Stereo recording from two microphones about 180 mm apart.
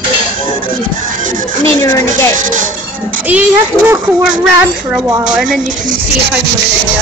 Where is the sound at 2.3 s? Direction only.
45° right (ahead or behind).